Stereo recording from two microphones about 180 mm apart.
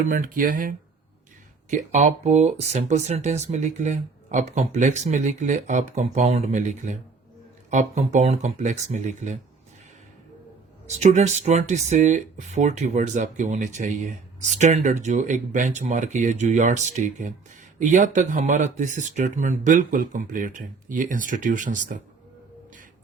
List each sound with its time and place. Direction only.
0.0 s speech: 50° right (ahead or behind)
10.8 s speech: 40° right (ahead or behind)